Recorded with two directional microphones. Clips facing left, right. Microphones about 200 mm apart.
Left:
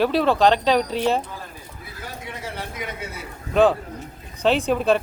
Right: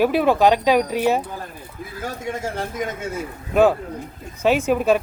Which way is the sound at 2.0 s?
45° right (ahead or behind).